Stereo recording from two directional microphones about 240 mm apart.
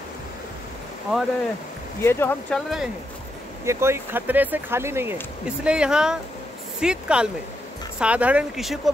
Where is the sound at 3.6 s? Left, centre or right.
Centre.